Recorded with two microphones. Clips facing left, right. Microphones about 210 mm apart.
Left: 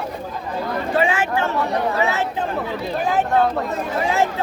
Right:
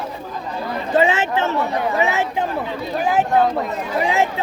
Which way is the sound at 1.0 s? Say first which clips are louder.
Right 3 dB; 25° right (ahead or behind).